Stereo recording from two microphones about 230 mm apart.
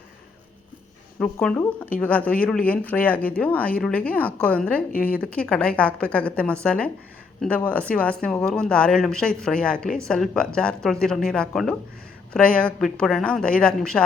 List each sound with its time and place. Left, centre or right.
1.2 s speech: centre